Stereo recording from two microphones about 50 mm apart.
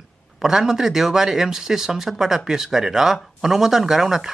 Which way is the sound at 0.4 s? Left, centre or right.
Centre.